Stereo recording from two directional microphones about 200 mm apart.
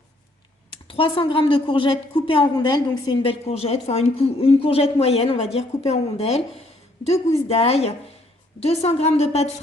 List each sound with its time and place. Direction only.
0.7 s a woman's voice: 25° left (ahead or behind)